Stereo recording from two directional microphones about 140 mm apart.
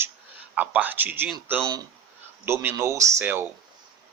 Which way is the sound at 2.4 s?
15° right (ahead or behind).